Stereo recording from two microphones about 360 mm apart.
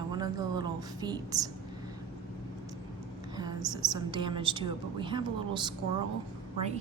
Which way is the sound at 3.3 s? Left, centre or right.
Centre.